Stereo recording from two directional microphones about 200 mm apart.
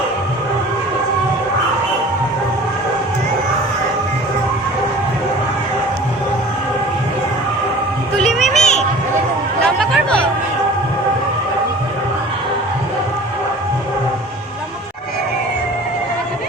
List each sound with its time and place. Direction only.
8.4 s children playing: 35° left (ahead or behind)
9.6 s chatter: 5° left (ahead or behind)